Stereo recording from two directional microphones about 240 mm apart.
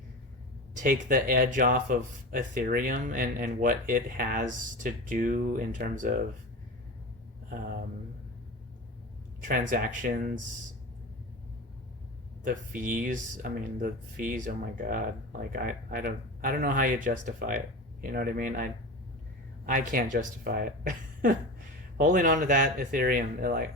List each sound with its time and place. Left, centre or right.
0.7 s speech: right
9.4 s speech: right
12.5 s speech: right